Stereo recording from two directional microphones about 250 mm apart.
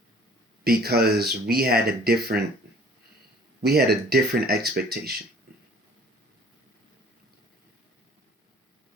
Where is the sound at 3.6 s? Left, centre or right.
Right.